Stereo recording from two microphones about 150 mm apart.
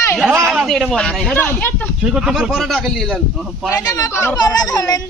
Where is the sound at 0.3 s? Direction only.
15° right (ahead or behind).